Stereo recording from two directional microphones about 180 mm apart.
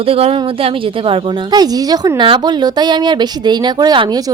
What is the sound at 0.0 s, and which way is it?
Speech, 35° right (ahead or behind).